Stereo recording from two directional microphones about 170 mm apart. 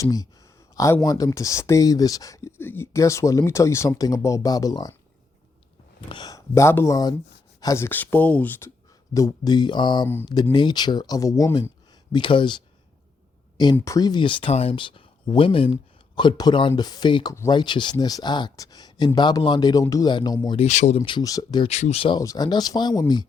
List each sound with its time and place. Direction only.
0.0 s speech: 20° left (ahead or behind)
6.1 s speech: 25° left (ahead or behind)
9.1 s speech: 20° left (ahead or behind)
12.1 s speech: 30° left (ahead or behind)
13.7 s speech: 20° left (ahead or behind)
20.6 s speech: 45° left (ahead or behind)
21.0 s speech: 25° left (ahead or behind)
21.7 s speech: 40° left (ahead or behind)
22.2 s speech: 20° left (ahead or behind)